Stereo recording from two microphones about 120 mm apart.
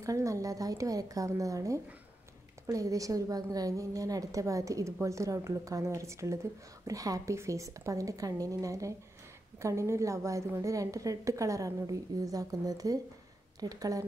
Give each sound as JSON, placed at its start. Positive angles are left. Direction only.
{"t": 0.0, "sound": "a woman's voice", "side_deg": -25}